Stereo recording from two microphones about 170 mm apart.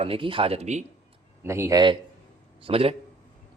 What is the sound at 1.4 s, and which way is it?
Speech, 15° right (ahead or behind).